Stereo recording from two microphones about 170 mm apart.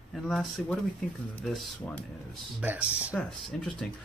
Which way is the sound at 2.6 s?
10° right (ahead or behind).